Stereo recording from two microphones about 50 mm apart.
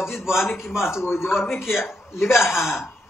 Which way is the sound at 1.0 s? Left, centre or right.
Left.